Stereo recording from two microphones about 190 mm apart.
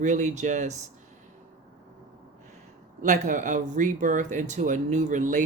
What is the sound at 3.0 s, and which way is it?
Speech, 40° right (ahead or behind).